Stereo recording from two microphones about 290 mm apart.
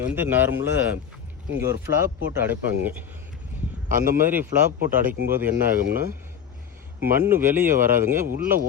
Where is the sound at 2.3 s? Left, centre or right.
Centre.